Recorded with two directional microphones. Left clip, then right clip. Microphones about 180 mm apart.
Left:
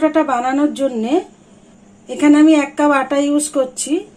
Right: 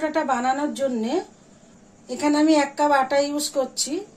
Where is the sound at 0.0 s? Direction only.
40° left (ahead or behind).